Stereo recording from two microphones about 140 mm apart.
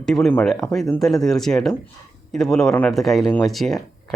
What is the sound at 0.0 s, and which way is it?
Speech, 5° left (ahead or behind).